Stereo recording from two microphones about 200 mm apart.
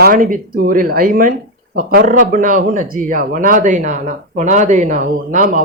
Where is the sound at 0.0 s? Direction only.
45° right (ahead or behind).